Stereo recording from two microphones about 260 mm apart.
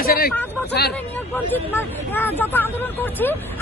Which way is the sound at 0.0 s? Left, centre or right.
Left.